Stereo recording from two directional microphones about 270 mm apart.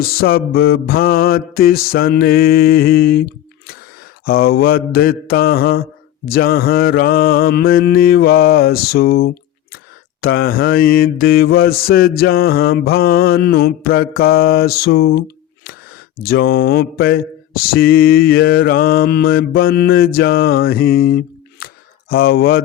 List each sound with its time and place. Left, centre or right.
0.0 s mantra: left
16.2 s mantra: left